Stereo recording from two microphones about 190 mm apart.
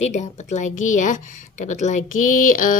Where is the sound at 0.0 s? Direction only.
35° left (ahead or behind).